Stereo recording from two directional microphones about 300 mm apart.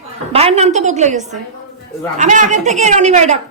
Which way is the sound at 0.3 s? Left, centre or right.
Centre.